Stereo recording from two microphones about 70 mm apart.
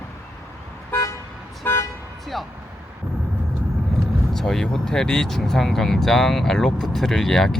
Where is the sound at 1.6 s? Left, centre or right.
Left.